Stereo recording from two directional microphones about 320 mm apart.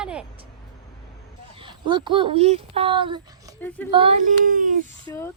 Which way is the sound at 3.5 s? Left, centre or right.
Centre.